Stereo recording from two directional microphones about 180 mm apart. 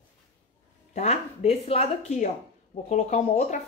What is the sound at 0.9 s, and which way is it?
Speech, 35° left (ahead or behind).